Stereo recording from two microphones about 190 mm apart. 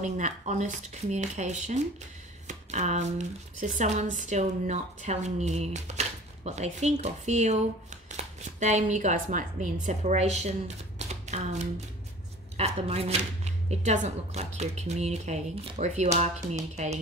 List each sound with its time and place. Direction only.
0.0 s speech: 40° right (ahead or behind)
11.0 s typewriter: 35° right (ahead or behind)
12.5 s speech: 35° right (ahead or behind)